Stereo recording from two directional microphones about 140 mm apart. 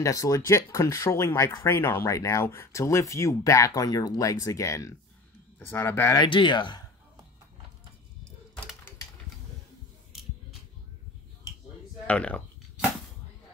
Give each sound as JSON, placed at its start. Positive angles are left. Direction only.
{"t": 0.0, "sound": "speech", "side_deg": 25}
{"t": 6.2, "sound": "speech", "side_deg": 35}
{"t": 12.1, "sound": "speech", "side_deg": 10}